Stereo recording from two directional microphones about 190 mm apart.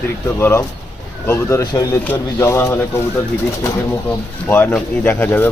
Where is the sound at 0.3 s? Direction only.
10° left (ahead or behind).